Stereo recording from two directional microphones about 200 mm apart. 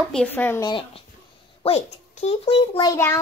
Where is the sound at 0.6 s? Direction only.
25° left (ahead or behind).